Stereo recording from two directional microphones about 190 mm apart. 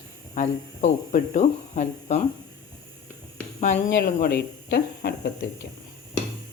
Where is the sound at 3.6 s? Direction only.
40° left (ahead or behind); by 5.3 s 60° left (ahead or behind).